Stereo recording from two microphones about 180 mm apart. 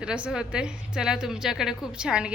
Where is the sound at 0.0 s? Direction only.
5° right (ahead or behind).